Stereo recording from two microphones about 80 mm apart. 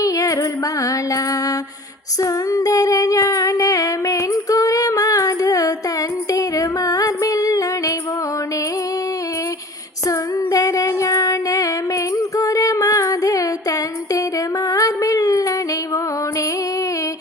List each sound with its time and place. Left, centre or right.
0.0 s music: left
2.2 s female singing: left
6.3 s music: left
10.1 s female singing: left
12.1 s music: left
14.7 s a sound: left